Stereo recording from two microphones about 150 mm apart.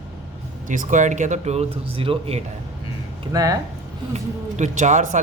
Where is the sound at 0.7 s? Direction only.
60° right (ahead or behind); by 2.4 s 40° right (ahead or behind).